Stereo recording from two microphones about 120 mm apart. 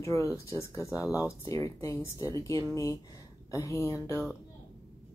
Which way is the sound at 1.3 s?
25° left (ahead or behind).